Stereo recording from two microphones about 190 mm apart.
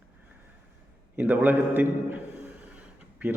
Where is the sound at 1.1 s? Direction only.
10° right (ahead or behind).